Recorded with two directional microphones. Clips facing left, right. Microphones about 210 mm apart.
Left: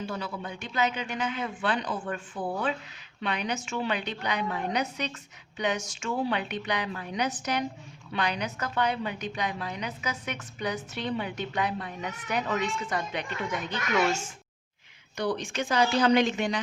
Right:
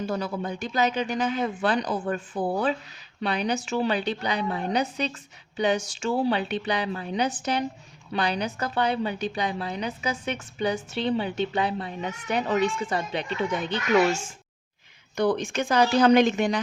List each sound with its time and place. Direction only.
0.0 s a woman's voice: 40° right (ahead or behind)
15.1 s speech: 50° right (ahead or behind)